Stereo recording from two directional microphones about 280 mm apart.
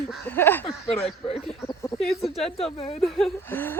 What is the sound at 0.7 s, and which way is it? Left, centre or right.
Speech, left.